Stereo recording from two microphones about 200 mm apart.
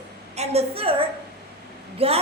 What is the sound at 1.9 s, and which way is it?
Speech, 30° right (ahead or behind).